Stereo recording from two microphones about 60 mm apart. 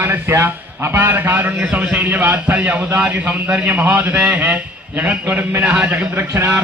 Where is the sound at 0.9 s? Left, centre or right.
Right.